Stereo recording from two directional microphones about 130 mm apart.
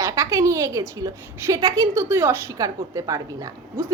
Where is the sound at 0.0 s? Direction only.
25° right (ahead or behind).